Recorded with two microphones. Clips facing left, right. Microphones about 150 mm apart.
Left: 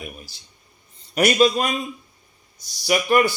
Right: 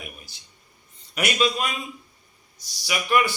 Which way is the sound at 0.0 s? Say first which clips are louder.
Left 5 dB; 35° left (ahead or behind).